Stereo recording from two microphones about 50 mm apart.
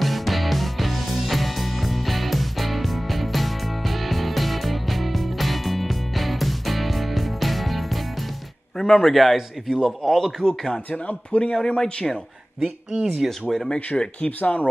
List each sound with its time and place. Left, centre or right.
0.0 s music: centre
8.7 s a man's voice: centre
10.9 s speech: left
11.5 s speech: centre
12.9 s speech: centre
13.5 s speech: centre
14.4 s speech: left